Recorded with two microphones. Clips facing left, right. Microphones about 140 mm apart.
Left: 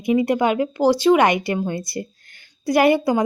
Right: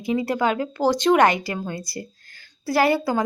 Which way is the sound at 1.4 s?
20° left (ahead or behind).